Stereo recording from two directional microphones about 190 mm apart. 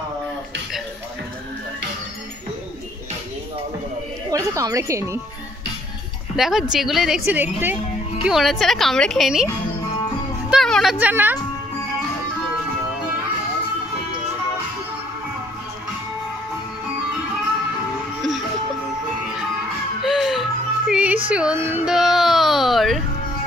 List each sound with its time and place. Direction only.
4.3 s speech: 20° right (ahead or behind)
6.3 s a woman's voice: centre (ahead or behind)
10.5 s speech: centre (ahead or behind)
20.0 s music: centre (ahead or behind)
20.9 s a sound: 5° right (ahead or behind)